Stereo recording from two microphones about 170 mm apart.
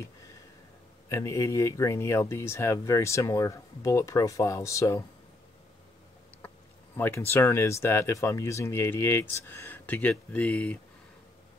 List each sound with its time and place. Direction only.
1.0 s speech: 15° left (ahead or behind)
7.0 s speech: 15° left (ahead or behind)